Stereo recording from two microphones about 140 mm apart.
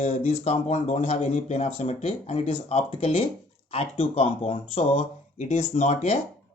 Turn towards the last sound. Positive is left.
turn(degrees=50)  # may be behind; listen again after turning